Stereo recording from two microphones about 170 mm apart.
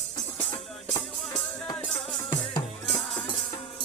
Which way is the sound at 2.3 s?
25° left (ahead or behind).